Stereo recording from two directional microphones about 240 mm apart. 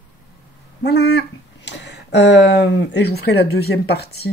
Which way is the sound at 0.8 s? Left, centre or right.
Left.